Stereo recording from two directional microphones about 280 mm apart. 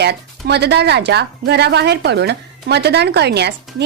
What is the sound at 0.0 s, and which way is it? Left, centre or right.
A woman's voice, right.